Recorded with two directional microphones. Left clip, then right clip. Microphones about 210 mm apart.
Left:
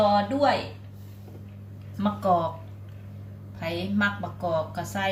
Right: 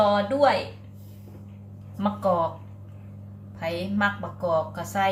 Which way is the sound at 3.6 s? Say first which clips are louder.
Right 1 dB; 10° right (ahead or behind).